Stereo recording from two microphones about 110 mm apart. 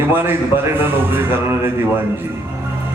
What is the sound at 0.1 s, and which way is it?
A man's voice, 20° right (ahead or behind).